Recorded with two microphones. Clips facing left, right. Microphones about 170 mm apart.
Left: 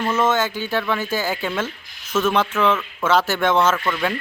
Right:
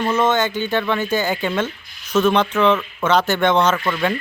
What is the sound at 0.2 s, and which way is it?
Speech, 5° left (ahead or behind).